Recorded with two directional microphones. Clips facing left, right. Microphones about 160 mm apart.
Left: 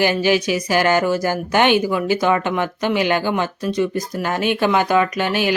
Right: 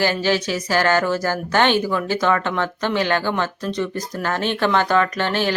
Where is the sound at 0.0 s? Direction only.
15° left (ahead or behind).